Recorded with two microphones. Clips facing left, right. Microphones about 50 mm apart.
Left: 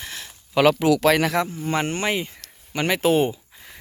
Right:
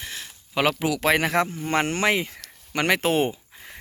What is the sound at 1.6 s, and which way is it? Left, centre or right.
Speech, right.